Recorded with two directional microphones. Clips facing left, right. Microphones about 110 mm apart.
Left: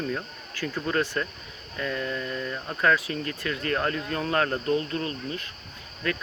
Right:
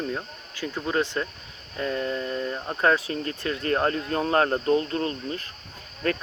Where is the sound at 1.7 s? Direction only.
30° right (ahead or behind).